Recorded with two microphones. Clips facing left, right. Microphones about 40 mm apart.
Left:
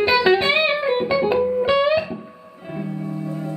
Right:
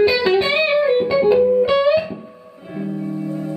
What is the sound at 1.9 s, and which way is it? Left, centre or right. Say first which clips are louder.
Music: right 3 dB; centre.